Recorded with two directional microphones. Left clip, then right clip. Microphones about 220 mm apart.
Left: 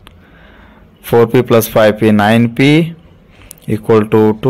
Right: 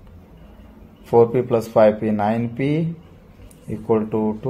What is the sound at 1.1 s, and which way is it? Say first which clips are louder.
Speech: left 6 dB; 50° left (ahead or behind).